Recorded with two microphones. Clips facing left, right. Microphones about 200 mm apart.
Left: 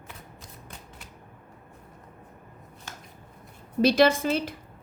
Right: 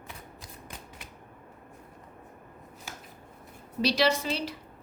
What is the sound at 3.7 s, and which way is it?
Speech, 50° left (ahead or behind).